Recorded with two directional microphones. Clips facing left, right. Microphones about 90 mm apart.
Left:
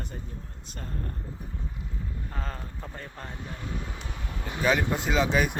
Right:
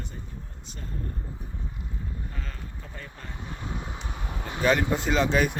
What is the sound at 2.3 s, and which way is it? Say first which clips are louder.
Speech: left 4 dB; 40° left (ahead or behind).